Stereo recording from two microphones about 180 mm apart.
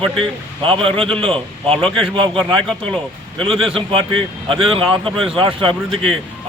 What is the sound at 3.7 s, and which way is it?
Speech, 30° right (ahead or behind).